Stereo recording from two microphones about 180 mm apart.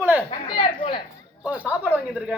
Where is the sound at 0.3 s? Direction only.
25° left (ahead or behind).